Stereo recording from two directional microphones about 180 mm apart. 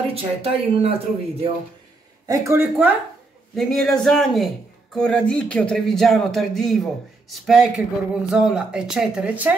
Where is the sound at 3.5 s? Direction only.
Centre (ahead or behind).